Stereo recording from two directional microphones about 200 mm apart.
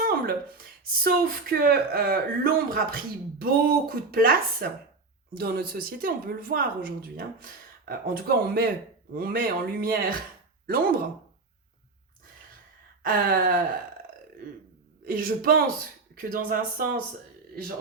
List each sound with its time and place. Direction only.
0.0 s speech: 50° right (ahead or behind)
13.1 s speech: 45° right (ahead or behind)
15.0 s speech: 45° right (ahead or behind)